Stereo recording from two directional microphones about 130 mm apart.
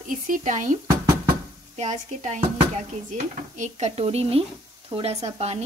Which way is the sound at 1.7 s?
65° right (ahead or behind).